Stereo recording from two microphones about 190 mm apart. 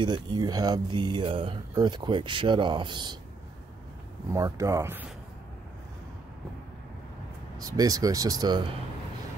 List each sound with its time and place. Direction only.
0.0 s speech: 20° right (ahead or behind)
4.3 s speech: 15° right (ahead or behind)
7.5 s speech: 20° right (ahead or behind)